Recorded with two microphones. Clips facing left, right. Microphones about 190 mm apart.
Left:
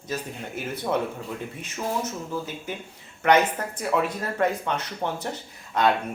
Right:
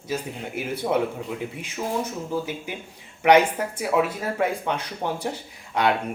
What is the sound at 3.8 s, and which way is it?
Speech, 5° right (ahead or behind).